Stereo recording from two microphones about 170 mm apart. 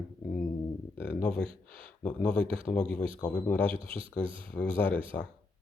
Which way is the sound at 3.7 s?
35° right (ahead or behind).